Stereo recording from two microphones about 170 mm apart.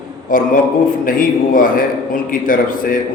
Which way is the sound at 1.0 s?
55° left (ahead or behind).